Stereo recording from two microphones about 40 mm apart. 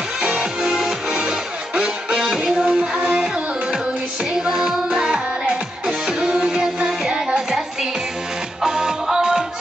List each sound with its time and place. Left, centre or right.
0.2 s music: right
4.3 s music: centre
5.9 s music: right